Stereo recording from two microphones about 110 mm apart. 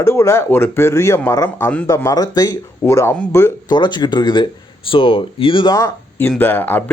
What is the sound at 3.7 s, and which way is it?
Speech, 45° left (ahead or behind).